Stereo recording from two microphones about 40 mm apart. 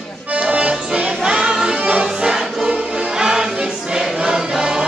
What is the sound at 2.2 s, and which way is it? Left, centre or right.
Choir, centre.